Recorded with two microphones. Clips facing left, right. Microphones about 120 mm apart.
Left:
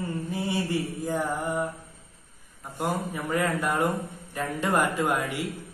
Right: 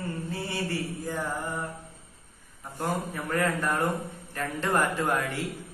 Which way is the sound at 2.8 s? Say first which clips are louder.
Left 2 dB; 10° left (ahead or behind).